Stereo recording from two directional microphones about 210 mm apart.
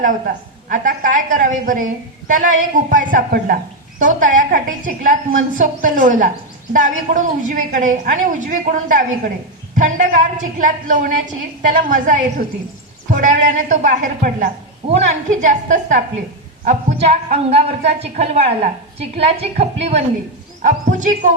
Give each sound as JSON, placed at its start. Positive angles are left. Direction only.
{"t": 0.7, "sound": "a woman's voice", "side_deg": -40}